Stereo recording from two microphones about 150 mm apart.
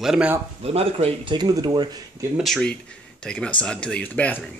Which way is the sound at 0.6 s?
40° right (ahead or behind).